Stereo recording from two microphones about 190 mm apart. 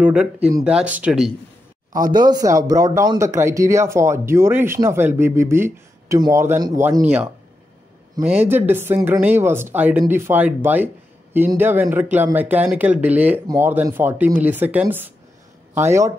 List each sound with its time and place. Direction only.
0.0 s speech: 5° right (ahead or behind)
1.9 s speech: 45° right (ahead or behind)
2.1 s speech: 20° right (ahead or behind)